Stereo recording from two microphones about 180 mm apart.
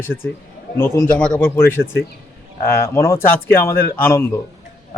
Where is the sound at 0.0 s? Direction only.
15° left (ahead or behind).